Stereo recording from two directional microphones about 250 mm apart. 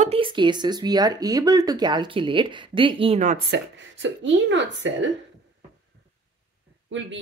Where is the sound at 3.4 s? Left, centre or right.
Right.